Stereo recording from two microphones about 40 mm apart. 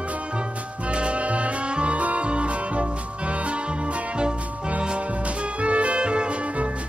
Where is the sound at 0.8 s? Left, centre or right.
Right.